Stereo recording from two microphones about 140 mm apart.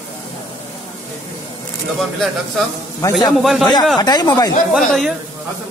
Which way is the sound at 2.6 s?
Centre (ahead or behind).